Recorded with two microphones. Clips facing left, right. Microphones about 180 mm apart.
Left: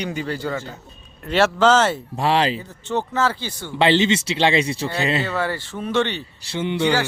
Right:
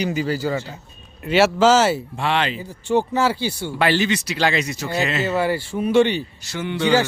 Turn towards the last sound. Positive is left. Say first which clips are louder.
# left 1 dB
turn(degrees=20)  # may be behind; listen again after turning